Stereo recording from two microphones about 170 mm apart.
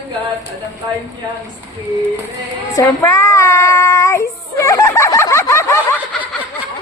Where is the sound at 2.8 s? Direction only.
15° left (ahead or behind).